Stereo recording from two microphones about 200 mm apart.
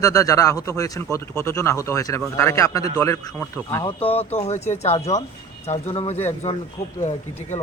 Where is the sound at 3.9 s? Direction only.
30° left (ahead or behind).